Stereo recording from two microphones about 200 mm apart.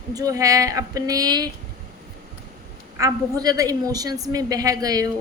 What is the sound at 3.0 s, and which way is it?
A woman's voice, 20° right (ahead or behind).